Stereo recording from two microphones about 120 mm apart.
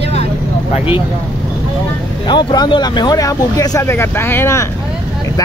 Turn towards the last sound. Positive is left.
turn(degrees=20)  # may be behind; listen again after turning